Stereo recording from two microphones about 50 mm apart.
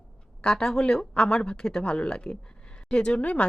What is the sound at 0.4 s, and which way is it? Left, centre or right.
Speech, centre.